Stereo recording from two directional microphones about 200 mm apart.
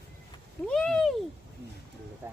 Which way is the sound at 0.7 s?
5° left (ahead or behind).